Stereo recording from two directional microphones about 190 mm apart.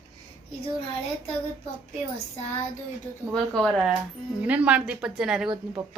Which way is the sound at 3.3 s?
Centre (ahead or behind).